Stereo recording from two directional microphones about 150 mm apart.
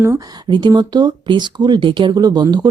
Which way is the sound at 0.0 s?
20° right (ahead or behind).